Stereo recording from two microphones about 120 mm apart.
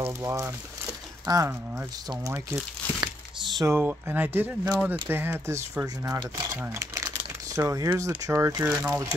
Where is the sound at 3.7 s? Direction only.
15° right (ahead or behind).